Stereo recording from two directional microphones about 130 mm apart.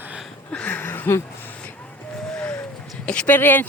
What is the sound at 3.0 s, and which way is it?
Speech, 10° left (ahead or behind).